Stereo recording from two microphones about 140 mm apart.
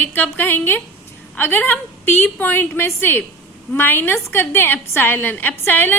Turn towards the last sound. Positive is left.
turn(degrees=15)  # may be behind; listen again after turning